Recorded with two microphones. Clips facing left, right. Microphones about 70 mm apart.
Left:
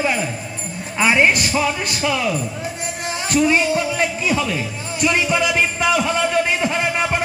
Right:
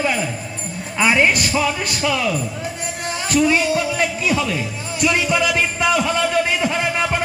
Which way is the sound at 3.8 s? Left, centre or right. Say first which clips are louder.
Even; left.